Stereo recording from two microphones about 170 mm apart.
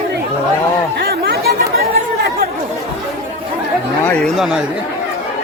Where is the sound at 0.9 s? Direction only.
65° right (ahead or behind).